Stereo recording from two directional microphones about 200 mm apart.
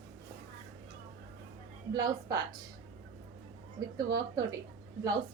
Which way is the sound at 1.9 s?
20° right (ahead or behind).